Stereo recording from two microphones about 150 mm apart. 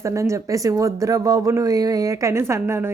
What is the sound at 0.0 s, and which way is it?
Speech, 20° right (ahead or behind).